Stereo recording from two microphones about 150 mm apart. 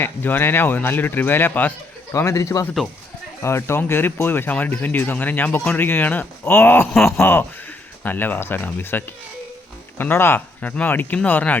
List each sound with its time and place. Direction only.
0.0 s speech: 15° left (ahead or behind)